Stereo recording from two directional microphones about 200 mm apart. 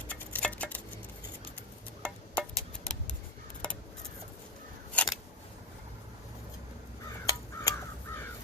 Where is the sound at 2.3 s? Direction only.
5° left (ahead or behind).